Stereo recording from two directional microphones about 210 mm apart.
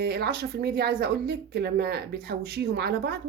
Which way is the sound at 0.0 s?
50° right (ahead or behind).